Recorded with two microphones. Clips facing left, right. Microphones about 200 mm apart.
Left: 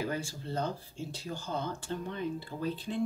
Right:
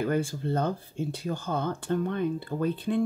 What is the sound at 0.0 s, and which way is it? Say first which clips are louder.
Speech: right 8 dB; 55° right (ahead or behind).